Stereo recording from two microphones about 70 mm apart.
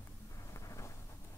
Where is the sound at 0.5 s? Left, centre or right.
Left.